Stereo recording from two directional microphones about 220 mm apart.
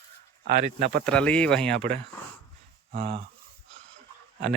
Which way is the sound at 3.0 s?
25° right (ahead or behind).